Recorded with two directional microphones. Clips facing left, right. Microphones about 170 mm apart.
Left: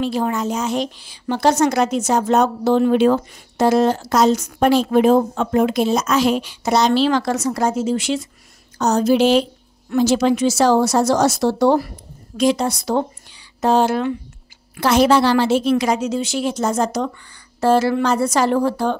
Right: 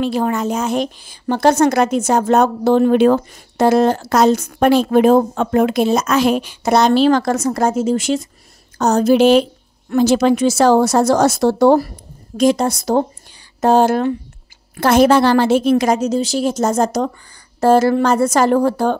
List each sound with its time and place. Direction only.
0.0 s a woman's voice: 60° right (ahead or behind)